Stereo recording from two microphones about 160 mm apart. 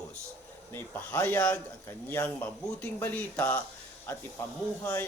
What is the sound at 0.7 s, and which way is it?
A man's voice, 15° left (ahead or behind).